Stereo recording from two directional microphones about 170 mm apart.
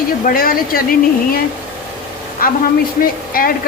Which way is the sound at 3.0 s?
60° left (ahead or behind).